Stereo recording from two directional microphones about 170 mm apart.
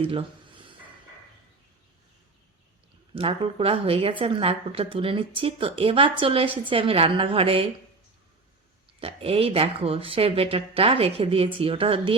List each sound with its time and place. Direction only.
0.0 s speech: 30° right (ahead or behind)
3.2 s speech: 35° right (ahead or behind)
9.0 s speech: 35° right (ahead or behind)